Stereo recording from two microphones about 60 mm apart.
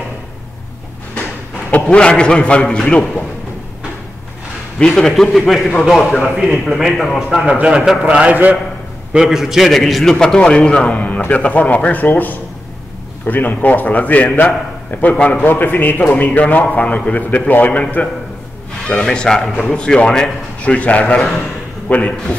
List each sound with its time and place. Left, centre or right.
1.7 s a man's voice: left
4.7 s a man's voice: centre
7.5 s a man's voice: centre
7.8 s a man's voice: centre
8.1 s a man's voice: right
9.1 s a man's voice: centre; by 18.0 s left
18.9 s a man's voice: centre
21.2 s a man's voice: centre
21.8 s a man's voice: left